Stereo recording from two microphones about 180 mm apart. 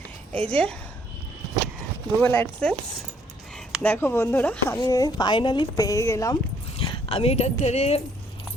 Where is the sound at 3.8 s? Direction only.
10° left (ahead or behind).